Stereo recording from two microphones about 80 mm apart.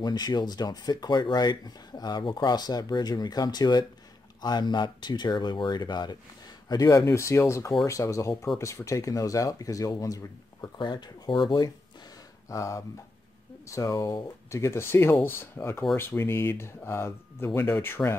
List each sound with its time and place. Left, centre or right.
0.0 s speech: left
6.7 s speech: left
10.8 s speech: left
12.4 s speech: left